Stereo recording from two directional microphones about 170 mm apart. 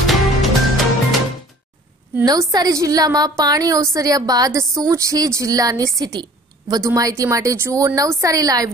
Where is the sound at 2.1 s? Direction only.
20° right (ahead or behind).